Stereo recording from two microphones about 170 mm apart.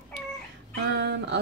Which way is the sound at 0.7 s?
80° right.